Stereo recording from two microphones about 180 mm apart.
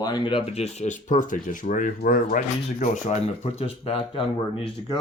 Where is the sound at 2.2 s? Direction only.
45° left (ahead or behind).